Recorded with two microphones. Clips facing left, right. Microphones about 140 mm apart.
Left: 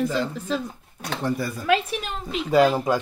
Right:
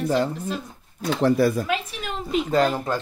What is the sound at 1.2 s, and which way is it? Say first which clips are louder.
Speech: right 8 dB; 80° right.